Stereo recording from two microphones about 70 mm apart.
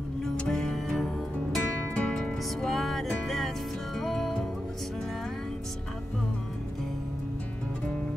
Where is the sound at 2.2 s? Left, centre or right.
Centre.